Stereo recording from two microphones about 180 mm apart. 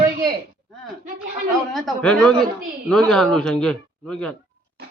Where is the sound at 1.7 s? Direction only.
Centre (ahead or behind).